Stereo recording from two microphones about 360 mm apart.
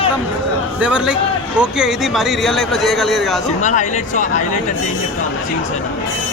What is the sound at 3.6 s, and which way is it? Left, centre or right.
Speech, centre.